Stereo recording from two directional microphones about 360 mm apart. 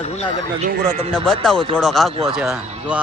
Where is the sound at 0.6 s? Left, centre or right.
Right.